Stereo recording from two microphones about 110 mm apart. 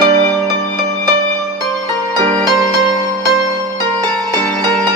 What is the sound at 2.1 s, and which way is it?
Music, 45° right (ahead or behind).